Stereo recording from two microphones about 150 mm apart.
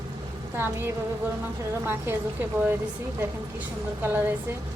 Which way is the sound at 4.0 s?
15° right (ahead or behind).